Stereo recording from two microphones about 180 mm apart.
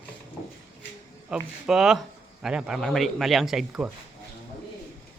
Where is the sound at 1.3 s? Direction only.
5° right (ahead or behind).